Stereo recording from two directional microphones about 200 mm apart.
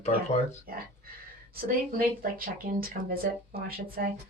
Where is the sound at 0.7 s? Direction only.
45° right (ahead or behind).